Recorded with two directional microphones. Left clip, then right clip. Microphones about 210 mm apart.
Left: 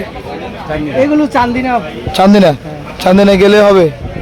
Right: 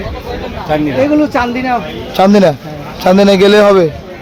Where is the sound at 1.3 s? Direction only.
25° left (ahead or behind).